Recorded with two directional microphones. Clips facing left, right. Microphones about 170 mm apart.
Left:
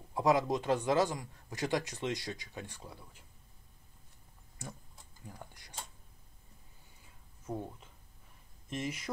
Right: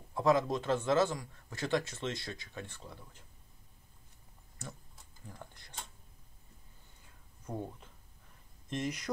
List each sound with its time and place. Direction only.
0.1 s a man's voice: 15° left (ahead or behind)
5.3 s speech: 15° left (ahead or behind)
7.5 s speech: centre (ahead or behind)
8.6 s speech: 5° left (ahead or behind)